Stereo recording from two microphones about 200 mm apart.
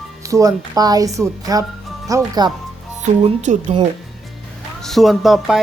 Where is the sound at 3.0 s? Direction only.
35° right (ahead or behind).